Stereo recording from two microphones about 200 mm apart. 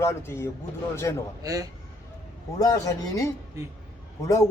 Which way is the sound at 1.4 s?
15° right (ahead or behind).